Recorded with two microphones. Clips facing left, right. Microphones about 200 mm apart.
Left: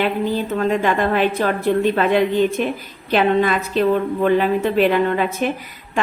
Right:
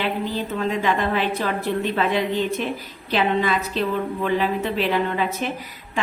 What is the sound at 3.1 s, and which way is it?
A woman's voice, 50° left (ahead or behind).